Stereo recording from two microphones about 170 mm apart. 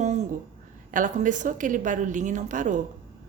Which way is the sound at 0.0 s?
45° right (ahead or behind).